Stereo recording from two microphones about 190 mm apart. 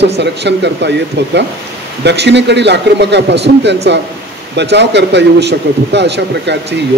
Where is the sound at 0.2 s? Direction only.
65° right (ahead or behind).